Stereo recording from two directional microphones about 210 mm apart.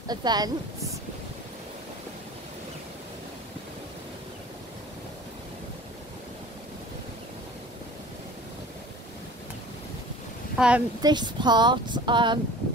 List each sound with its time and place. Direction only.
0.1 s speech: 20° right (ahead or behind)
10.6 s speech: 5° right (ahead or behind)
11.0 s speech: 20° right (ahead or behind)